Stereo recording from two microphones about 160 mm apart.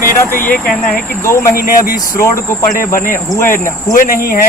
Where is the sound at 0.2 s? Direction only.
15° left (ahead or behind).